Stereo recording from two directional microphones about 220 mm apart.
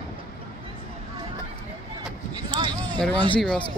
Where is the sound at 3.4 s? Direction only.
Centre (ahead or behind).